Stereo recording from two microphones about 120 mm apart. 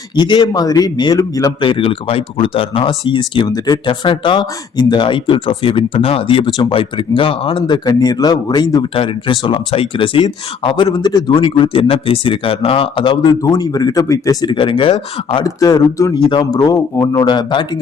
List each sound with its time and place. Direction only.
0.2 s a man's voice: 35° left (ahead or behind)
1.6 s speech: 45° left (ahead or behind)
7.9 s a man's voice: 35° left (ahead or behind)
9.0 s speech: 45° left (ahead or behind)
10.8 s speech: 35° left (ahead or behind)
13.4 s a man's voice: 30° left (ahead or behind)
14.5 s speech: 45° left (ahead or behind)
15.4 s a man's voice: 30° left (ahead or behind)